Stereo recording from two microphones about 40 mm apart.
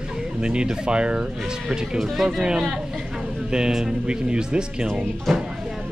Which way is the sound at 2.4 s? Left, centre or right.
Centre.